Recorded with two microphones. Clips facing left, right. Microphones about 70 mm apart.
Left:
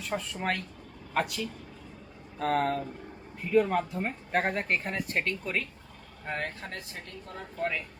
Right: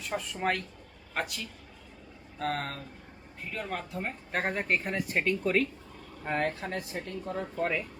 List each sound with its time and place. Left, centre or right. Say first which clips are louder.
0.0 s speech: right 1 dB; centre